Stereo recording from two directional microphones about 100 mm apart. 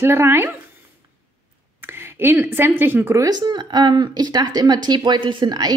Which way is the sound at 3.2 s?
45° right (ahead or behind).